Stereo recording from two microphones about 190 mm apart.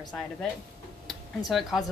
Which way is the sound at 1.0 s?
Centre (ahead or behind).